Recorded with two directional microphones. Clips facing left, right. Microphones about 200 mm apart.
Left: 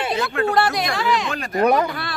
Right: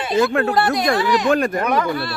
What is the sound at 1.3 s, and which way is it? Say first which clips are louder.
Speech: right 8 dB; 50° right (ahead or behind).